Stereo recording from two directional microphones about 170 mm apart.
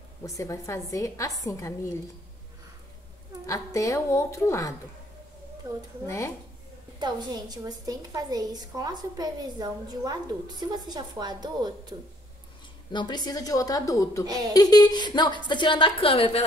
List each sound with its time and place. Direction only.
0.2 s a woman's voice: 20° left (ahead or behind)
3.4 s a woman's voice: 20° left (ahead or behind)
6.0 s speech: 15° left (ahead or behind)
7.0 s a woman's voice: 25° right (ahead or behind)
12.9 s a woman's voice: 25° left (ahead or behind)